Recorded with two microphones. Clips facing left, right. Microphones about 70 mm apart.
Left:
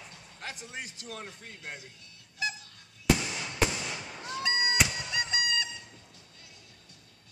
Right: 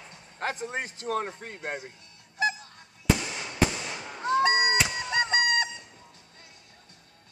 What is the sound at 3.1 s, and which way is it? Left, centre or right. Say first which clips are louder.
Fireworks: right 1 dB; right.